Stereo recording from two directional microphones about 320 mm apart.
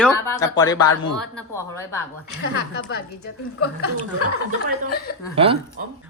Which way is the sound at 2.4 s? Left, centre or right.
Left.